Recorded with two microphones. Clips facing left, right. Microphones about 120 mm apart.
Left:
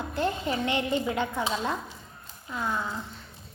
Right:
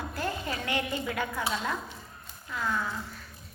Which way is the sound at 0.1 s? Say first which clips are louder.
Left 8 dB; 25° left (ahead or behind).